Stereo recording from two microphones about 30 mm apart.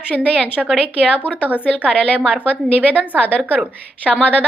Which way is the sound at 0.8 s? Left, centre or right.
Right.